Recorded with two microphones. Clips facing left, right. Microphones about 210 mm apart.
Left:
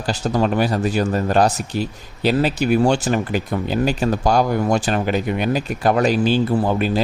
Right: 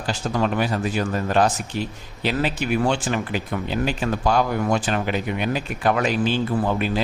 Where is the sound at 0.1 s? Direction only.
35° left (ahead or behind).